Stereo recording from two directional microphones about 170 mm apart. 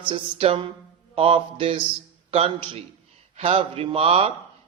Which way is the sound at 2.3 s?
35° right (ahead or behind).